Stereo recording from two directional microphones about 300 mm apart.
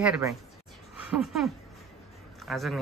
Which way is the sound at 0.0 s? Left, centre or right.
Centre.